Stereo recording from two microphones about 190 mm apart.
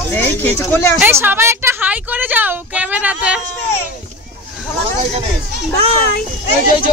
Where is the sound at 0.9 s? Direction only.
10° right (ahead or behind).